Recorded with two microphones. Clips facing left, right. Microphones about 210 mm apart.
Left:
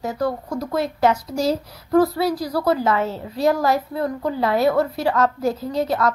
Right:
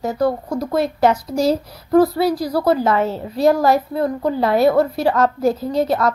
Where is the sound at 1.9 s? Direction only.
30° right (ahead or behind).